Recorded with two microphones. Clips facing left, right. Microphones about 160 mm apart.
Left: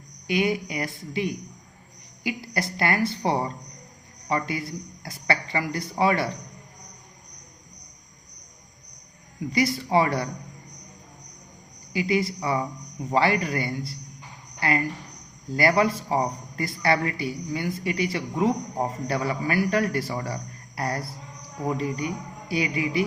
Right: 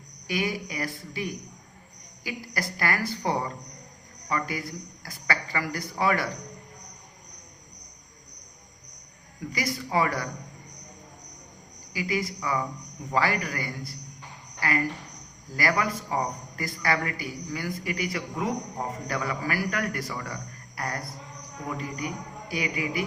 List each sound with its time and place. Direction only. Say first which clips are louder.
0.3 s a man's voice: left 5 dB; 25° left (ahead or behind)
9.5 s a man's voice: left 7 dB; 30° left (ahead or behind)
11.9 s a man's voice: left 5 dB; 25° left (ahead or behind)
15.5 s a man's voice: left 6 dB; 30° left (ahead or behind)